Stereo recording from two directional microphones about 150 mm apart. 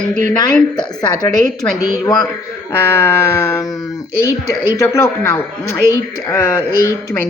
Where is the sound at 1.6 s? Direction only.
20° left (ahead or behind).